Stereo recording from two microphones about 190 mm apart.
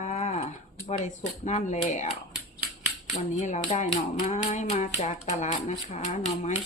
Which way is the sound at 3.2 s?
40° left (ahead or behind).